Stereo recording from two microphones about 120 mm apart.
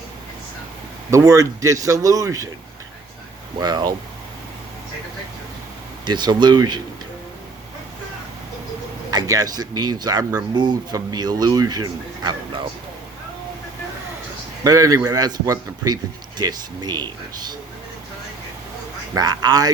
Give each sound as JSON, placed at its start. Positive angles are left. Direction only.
{"t": 1.1, "sound": "speech", "side_deg": -25}
{"t": 3.6, "sound": "speech", "side_deg": -35}
{"t": 6.1, "sound": "speech", "side_deg": -40}
{"t": 9.0, "sound": "speech", "side_deg": -30}
{"t": 14.6, "sound": "speech", "side_deg": -30}
{"t": 19.1, "sound": "speech", "side_deg": -35}